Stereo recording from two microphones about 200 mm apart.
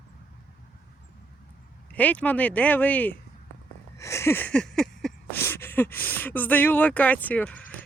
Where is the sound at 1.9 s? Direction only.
5° left (ahead or behind).